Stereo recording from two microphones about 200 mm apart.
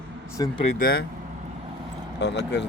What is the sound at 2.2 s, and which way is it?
Speech, 60° left (ahead or behind).